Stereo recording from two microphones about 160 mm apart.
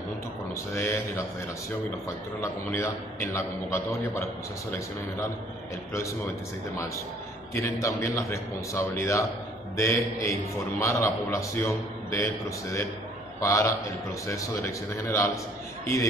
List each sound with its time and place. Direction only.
0.7 s a man's voice: 15° left (ahead or behind)
2.4 s a man's voice: 15° left (ahead or behind)
7.5 s a man's voice: 15° left (ahead or behind)